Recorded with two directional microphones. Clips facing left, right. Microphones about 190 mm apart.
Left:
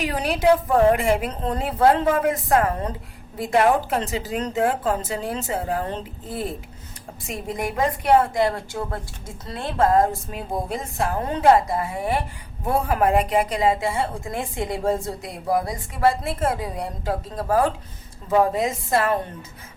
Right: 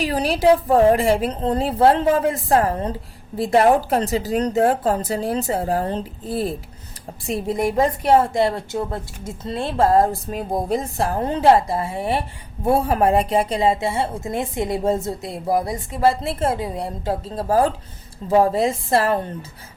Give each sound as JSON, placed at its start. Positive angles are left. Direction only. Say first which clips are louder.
{"t": 0.0, "sound": "a woman's voice", "louder": "right 3 dB", "side_deg": -35}